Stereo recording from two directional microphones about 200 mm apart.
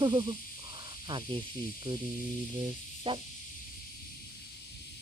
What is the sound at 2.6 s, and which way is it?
Music, 25° right (ahead or behind).